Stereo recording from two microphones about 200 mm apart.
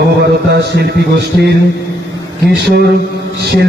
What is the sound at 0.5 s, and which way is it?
A man's voice, 55° right (ahead or behind).